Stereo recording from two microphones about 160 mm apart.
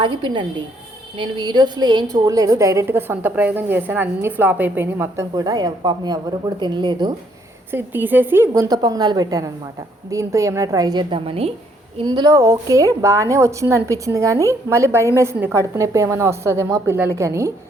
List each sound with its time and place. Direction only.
0.0 s a woman's voice: 30° right (ahead or behind)
7.7 s a woman's voice: 10° right (ahead or behind); by 11.5 s 35° right (ahead or behind)
11.9 s a woman's voice: 25° right (ahead or behind)